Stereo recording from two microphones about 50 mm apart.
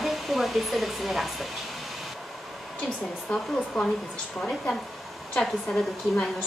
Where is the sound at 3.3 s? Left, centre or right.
Centre.